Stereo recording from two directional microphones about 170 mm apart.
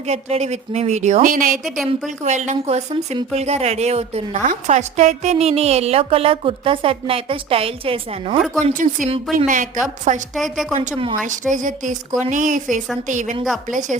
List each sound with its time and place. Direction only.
0.1 s a woman's voice: 40° right (ahead or behind); by 1.6 s 55° right (ahead or behind)
1.6 s a woman's voice: centre (ahead or behind)
2.0 s a woman's voice: 45° right (ahead or behind)
8.6 s a woman's voice: 50° right (ahead or behind)
10.3 s a woman's voice: centre (ahead or behind)
10.8 s a woman's voice: 35° right (ahead or behind)
11.3 s a woman's voice: 50° right (ahead or behind)